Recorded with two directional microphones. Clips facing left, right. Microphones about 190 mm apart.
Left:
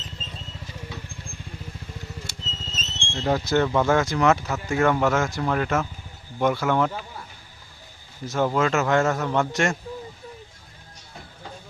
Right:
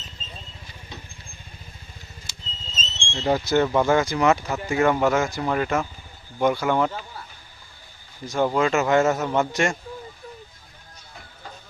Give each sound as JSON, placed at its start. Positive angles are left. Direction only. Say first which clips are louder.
{"t": 2.2, "sound": "a sound", "louder": "left 6 dB", "side_deg": 65}
{"t": 3.2, "sound": "speech", "louder": "right 1 dB", "side_deg": 0}
{"t": 8.3, "sound": "speech", "louder": "right 1 dB", "side_deg": 0}